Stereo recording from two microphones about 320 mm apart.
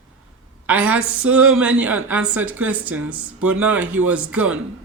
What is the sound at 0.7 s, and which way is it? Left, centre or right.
A woman's voice, centre.